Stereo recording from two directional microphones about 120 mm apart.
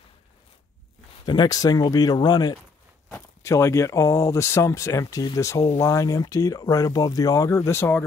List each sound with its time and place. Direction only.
1.2 s speech: 40° left (ahead or behind)
3.1 s speech: 20° left (ahead or behind)